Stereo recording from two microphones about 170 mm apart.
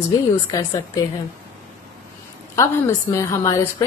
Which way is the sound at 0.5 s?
20° left (ahead or behind).